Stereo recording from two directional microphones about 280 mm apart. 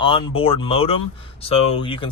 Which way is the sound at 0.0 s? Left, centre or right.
Centre.